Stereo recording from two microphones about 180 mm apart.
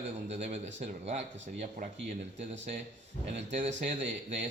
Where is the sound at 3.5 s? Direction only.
40° right (ahead or behind).